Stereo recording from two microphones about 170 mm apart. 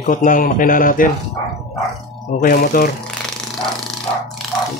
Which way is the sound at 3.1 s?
5° left (ahead or behind).